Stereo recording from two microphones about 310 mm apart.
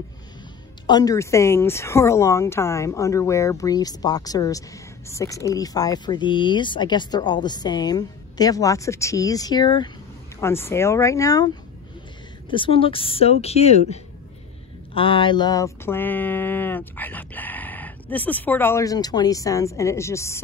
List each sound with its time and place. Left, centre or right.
0.8 s speech: centre
15.0 s speech: centre